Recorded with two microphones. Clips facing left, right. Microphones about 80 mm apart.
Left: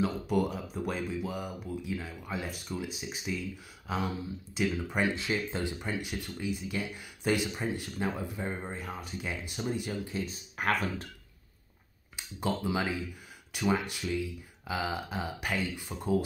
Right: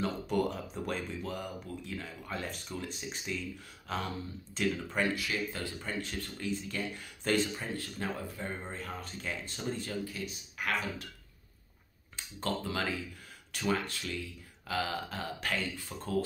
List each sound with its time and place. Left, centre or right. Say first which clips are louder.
0.0 s speech: left 2 dB; centre
10.1 s speech: left 5 dB; left
12.2 s speech: left 3 dB; centre